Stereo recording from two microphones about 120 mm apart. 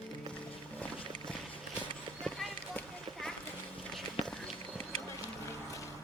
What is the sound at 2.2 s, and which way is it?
Run, 5° left (ahead or behind).